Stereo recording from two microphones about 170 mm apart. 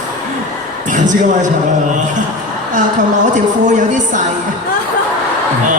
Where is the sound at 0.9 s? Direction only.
45° right (ahead or behind).